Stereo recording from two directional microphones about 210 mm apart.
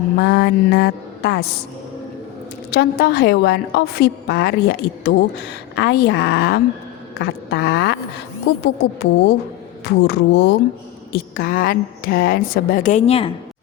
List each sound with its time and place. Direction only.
0.2 s a woman's voice: 50° left (ahead or behind)
2.6 s a woman's voice: 50° left (ahead or behind)
7.2 s a sound: 50° left (ahead or behind)
8.6 s a woman's voice: 55° left (ahead or behind); by 13.3 s 30° left (ahead or behind)